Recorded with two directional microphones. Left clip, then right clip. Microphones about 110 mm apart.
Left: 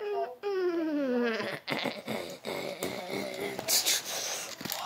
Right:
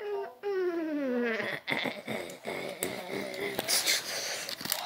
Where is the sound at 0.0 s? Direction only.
15° left (ahead or behind).